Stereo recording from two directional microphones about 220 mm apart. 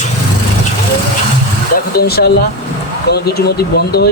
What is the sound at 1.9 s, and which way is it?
Speech, 45° left (ahead or behind).